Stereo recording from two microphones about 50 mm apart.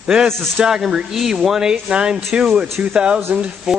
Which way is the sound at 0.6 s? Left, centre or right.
Centre.